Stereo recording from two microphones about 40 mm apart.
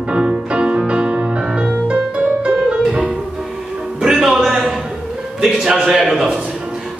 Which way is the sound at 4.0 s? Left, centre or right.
Centre.